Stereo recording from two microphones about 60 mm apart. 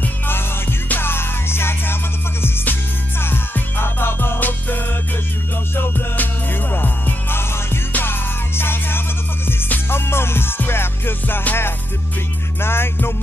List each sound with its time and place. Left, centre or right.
0.0 s music: left